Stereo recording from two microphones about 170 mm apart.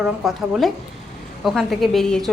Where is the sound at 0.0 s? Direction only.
Centre (ahead or behind).